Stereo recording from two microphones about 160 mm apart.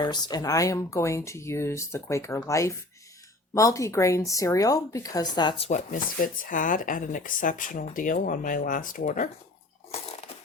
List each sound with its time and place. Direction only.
0.0 s speech: 25° left (ahead or behind)
5.9 s speech: 60° left (ahead or behind)